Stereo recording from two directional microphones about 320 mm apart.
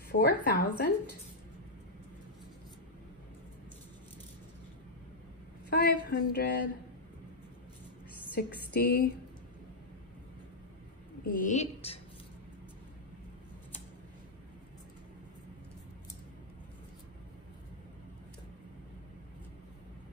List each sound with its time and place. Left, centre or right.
0.1 s speech: left
5.7 s a sound: left
8.4 s speech: left
11.3 s speech: left